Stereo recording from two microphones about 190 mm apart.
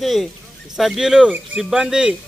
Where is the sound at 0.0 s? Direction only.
Centre (ahead or behind).